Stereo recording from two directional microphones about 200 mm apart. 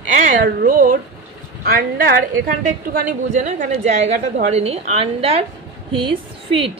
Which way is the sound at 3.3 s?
40° right (ahead or behind).